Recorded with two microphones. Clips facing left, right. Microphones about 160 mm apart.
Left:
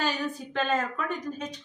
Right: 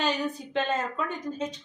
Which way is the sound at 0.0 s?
20° right (ahead or behind).